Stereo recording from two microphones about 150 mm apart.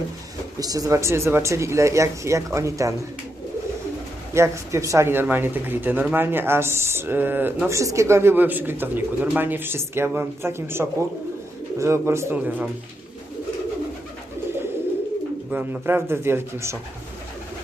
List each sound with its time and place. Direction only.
0.6 s speech: 25° right (ahead or behind)
4.4 s speech: 20° right (ahead or behind)
15.4 s speech: 10° right (ahead or behind)